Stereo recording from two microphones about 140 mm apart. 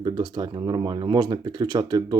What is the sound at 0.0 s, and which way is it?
Speech, 35° right (ahead or behind).